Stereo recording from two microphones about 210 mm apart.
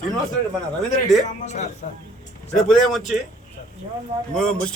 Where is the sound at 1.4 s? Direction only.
35° left (ahead or behind).